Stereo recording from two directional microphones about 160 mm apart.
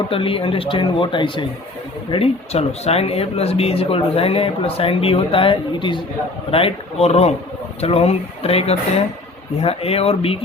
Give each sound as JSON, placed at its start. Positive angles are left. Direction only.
{"t": 0.1, "sound": "speech", "side_deg": 35}